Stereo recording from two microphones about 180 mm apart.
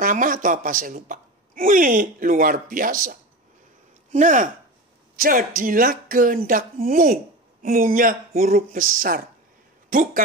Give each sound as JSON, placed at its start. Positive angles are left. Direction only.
{"t": 0.0, "sound": "a woman's voice", "side_deg": -50}